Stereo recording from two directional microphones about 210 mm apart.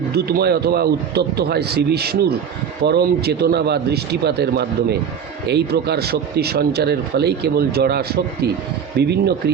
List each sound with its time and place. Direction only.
0.1 s speech: 50° right (ahead or behind)